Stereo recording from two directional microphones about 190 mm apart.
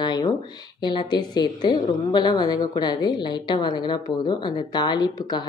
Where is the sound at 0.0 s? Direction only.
20° left (ahead or behind).